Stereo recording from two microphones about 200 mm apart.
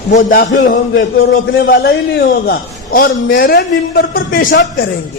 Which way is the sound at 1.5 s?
50° left (ahead or behind).